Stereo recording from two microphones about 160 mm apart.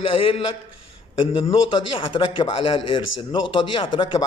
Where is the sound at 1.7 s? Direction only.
30° left (ahead or behind).